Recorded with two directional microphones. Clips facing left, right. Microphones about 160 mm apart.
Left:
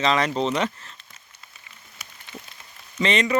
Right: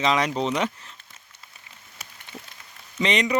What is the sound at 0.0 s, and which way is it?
Speech, 10° right (ahead or behind).